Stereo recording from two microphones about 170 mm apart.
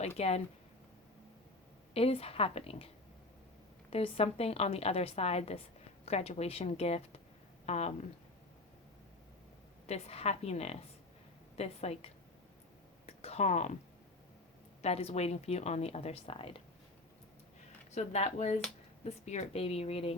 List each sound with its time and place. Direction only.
0.2 s a woman's voice: 40° left (ahead or behind)
1.9 s a woman's voice: 35° left (ahead or behind)
9.8 s a woman's voice: 40° left (ahead or behind)
13.1 s a sound: 40° left (ahead or behind)
14.8 s a woman's voice: 40° left (ahead or behind)
17.9 s a woman's voice: 40° left (ahead or behind)